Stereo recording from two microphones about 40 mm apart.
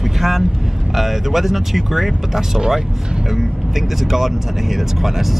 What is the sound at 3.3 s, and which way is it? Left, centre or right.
Speech, centre.